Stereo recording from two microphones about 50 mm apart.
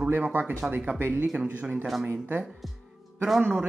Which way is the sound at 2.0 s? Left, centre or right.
Right.